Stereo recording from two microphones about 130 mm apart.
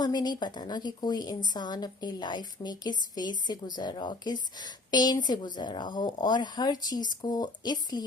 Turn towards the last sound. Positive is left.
turn(degrees=30)  # may be behind; listen again after turning